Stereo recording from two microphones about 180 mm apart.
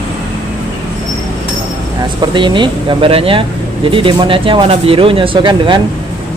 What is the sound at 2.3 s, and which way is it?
Speech, 25° right (ahead or behind).